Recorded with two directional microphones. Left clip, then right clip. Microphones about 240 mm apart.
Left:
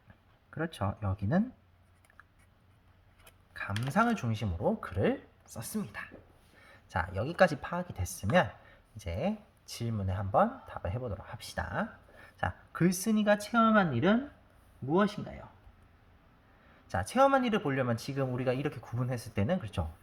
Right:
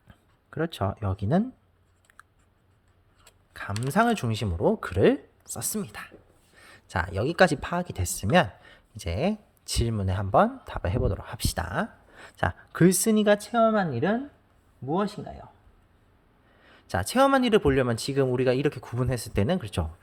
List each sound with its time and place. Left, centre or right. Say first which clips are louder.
0.5 s speech: right 7 dB; right
3.5 s speech: right 5 dB; right
16.9 s speech: right 4 dB; right